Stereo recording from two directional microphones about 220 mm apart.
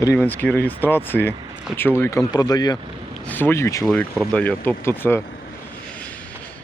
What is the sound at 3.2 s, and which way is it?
Speech, 10° left (ahead or behind).